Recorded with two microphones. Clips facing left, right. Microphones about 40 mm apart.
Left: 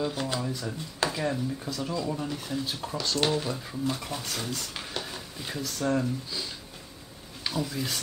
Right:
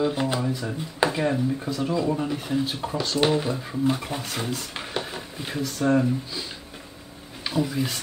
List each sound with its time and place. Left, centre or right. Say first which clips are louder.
0.0 s speech: right 6 dB; right
7.4 s speech: right 5 dB; centre